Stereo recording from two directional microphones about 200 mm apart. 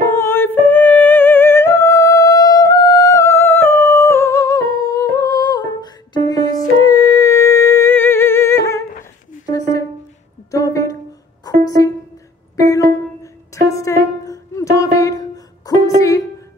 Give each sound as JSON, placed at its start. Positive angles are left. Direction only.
{"t": 0.0, "sound": "music", "side_deg": 15}
{"t": 10.5, "sound": "a sound", "side_deg": 15}
{"t": 12.5, "sound": "music", "side_deg": 15}